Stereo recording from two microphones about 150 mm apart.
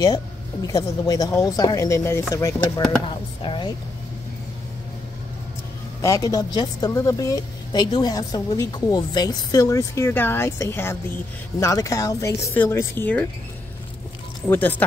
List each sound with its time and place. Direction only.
0.0 s a woman's voice: 25° left (ahead or behind)
3.4 s speech: 35° left (ahead or behind)
5.9 s a woman's voice: 20° left (ahead or behind)
14.5 s speech: 10° left (ahead or behind)